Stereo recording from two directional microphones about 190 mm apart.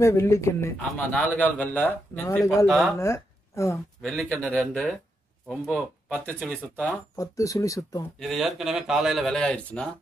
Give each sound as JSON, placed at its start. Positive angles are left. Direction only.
{"t": 0.0, "sound": "a man's voice", "side_deg": 15}
{"t": 2.6, "sound": "speech", "side_deg": 0}
{"t": 3.0, "sound": "speech", "side_deg": 15}
{"t": 4.0, "sound": "speech", "side_deg": 0}
{"t": 7.2, "sound": "a man's voice", "side_deg": 15}
{"t": 8.2, "sound": "speech", "side_deg": 0}